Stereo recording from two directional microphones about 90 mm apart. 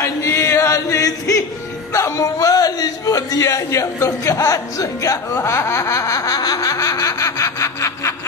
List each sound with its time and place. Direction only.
0.0 s chant: 35° left (ahead or behind)
2.0 s a man's voice: 35° left (ahead or behind)